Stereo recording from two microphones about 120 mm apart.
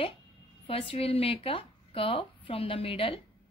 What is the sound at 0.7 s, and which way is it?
A woman's voice, 50° left (ahead or behind).